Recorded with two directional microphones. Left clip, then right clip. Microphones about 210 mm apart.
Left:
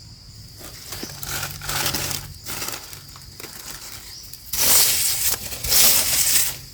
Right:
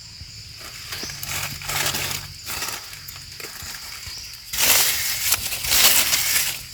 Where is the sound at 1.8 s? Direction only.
30° left (ahead or behind).